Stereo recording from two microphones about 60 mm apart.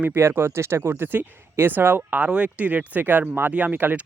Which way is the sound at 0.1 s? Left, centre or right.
Right.